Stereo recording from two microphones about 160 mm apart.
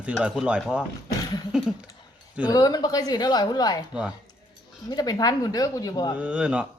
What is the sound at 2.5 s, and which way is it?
Speech, 25° left (ahead or behind).